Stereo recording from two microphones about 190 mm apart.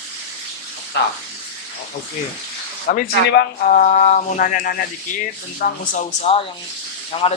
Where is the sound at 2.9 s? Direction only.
45° left (ahead or behind).